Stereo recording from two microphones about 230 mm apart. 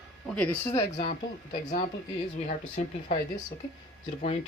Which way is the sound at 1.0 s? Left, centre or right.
Left.